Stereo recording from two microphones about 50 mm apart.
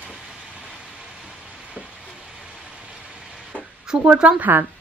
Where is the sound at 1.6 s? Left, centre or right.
Right.